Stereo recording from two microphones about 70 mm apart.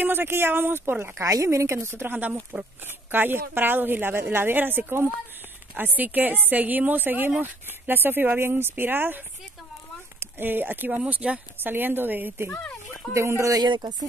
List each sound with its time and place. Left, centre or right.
0.0 s speech: right
1.1 s speech: right
10.2 s speech: right
11.6 s speech: right
13.1 s speech: right
13.5 s speech: right